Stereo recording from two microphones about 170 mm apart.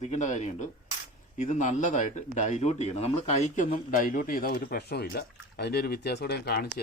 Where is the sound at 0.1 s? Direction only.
45° left (ahead or behind).